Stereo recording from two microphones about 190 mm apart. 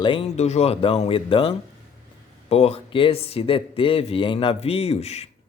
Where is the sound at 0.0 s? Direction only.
25° left (ahead or behind).